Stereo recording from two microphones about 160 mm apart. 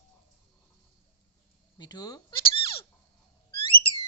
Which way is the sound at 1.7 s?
25° left (ahead or behind).